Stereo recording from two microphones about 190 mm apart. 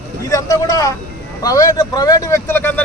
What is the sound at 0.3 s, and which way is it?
A man's voice, 15° left (ahead or behind).